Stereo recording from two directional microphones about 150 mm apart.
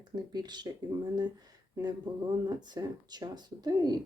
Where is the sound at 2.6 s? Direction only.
30° right (ahead or behind).